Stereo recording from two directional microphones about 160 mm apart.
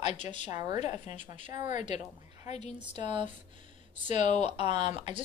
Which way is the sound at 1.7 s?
50° left (ahead or behind).